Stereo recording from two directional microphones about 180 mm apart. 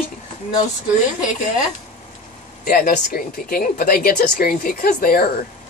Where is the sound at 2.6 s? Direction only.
55° left (ahead or behind).